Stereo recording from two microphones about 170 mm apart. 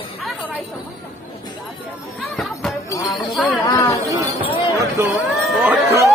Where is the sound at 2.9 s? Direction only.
20° left (ahead or behind).